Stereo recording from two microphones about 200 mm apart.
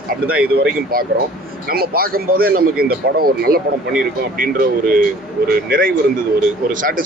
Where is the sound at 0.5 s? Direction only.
50° right (ahead or behind).